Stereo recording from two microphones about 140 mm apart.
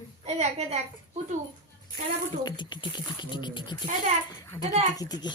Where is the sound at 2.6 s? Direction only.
35° left (ahead or behind).